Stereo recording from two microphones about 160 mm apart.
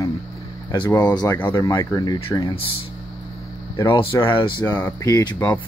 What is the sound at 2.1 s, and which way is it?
Speech, 35° left (ahead or behind).